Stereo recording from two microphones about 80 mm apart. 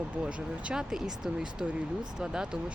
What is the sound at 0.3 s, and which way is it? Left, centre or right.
Speech, centre.